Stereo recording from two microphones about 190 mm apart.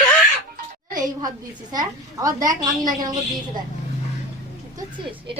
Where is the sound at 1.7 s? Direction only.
20° right (ahead or behind).